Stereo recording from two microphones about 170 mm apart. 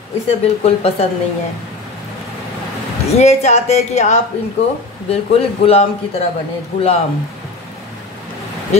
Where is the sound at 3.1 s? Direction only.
40° left (ahead or behind).